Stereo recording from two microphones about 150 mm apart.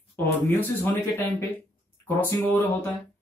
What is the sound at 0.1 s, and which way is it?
Speech, 15° left (ahead or behind).